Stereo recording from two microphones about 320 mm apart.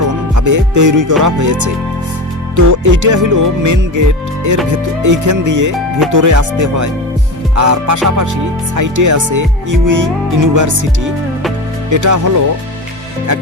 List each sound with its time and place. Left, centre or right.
0.3 s music: right
8.7 s speech: right
11.9 s music: right